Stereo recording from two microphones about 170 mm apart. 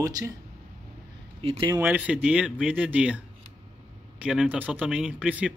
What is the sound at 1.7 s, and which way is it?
Speech, 10° right (ahead or behind).